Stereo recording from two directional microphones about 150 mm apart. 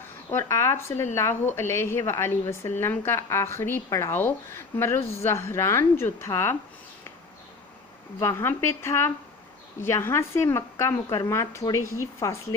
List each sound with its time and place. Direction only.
0.3 s a woman's voice: 20° left (ahead or behind)
8.2 s a woman's voice: 20° left (ahead or behind)